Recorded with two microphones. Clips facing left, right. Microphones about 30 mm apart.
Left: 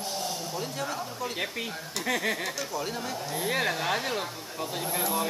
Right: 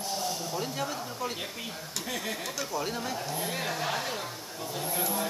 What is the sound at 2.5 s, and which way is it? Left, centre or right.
Speech, centre.